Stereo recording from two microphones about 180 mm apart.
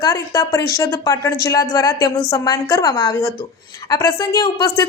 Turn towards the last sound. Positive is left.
turn(degrees=20)  # may be behind; listen again after turning